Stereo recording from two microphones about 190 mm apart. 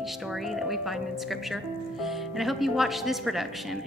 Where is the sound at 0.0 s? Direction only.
Centre (ahead or behind).